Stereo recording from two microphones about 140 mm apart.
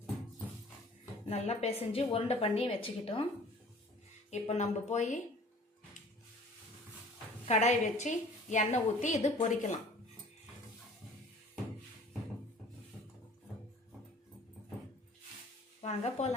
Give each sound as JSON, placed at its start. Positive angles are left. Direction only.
{"t": 1.3, "sound": "a woman's voice", "side_deg": 50}
{"t": 4.3, "sound": "a woman's voice", "side_deg": 55}
{"t": 7.4, "sound": "a woman's voice", "side_deg": 55}
{"t": 15.8, "sound": "a woman's voice", "side_deg": 55}